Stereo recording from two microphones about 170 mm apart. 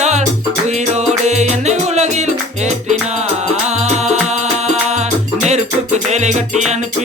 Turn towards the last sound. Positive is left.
turn(degrees=-40)  # may be behind; listen again after turning